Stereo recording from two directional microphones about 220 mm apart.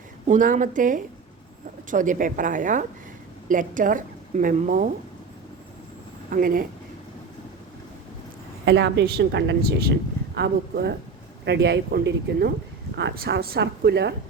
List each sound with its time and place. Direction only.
0.3 s speech: 35° right (ahead or behind)
6.3 s speech: 40° right (ahead or behind)
8.6 s a woman's voice: 50° right (ahead or behind)